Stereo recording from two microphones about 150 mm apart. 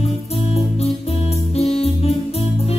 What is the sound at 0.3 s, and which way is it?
Music, 40° left (ahead or behind).